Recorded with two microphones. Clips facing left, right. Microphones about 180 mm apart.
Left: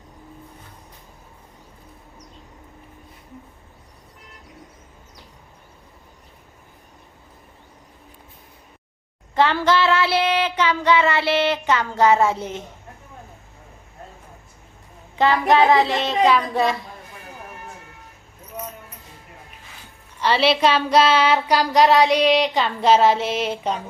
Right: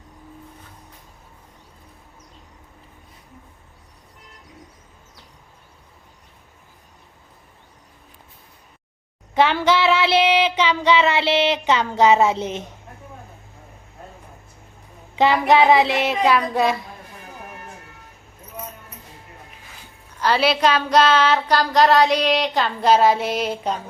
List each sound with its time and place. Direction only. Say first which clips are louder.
9.3 s child singing: right 1 dB; 15° right (ahead or behind)
15.2 s child singing: right 1 dB; 15° right (ahead or behind)
20.1 s child singing: left 1 dB; centre (ahead or behind)